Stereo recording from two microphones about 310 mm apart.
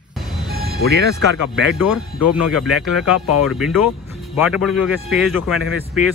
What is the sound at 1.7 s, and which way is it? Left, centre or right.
Speech, left.